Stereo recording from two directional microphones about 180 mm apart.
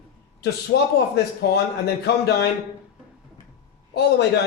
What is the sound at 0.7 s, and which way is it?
Speech, 75° left (ahead or behind).